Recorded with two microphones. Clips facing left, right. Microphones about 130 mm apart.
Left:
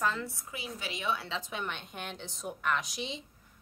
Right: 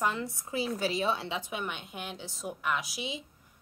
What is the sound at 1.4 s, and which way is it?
A woman's voice, 10° right (ahead or behind).